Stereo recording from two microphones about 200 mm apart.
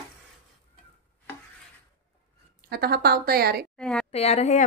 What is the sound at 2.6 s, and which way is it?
A woman's voice, 50° right (ahead or behind).